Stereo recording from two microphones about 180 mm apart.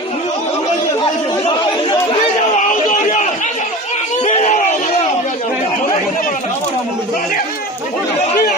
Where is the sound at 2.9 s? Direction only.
45° left (ahead or behind).